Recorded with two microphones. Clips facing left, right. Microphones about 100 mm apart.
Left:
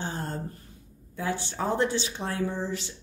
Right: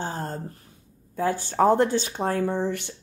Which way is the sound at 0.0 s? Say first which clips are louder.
Right 3 dB; 40° right (ahead or behind).